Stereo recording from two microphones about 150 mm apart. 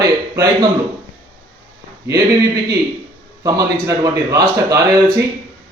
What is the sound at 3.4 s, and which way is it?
A man's voice, 25° right (ahead or behind).